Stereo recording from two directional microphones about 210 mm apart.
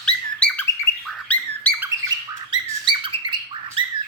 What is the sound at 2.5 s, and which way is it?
Bird, 20° right (ahead or behind).